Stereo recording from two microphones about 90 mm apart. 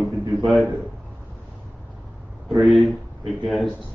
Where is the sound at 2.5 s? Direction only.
Centre (ahead or behind).